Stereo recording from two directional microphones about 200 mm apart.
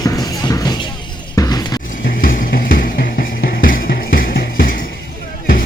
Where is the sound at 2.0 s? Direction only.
45° left (ahead or behind).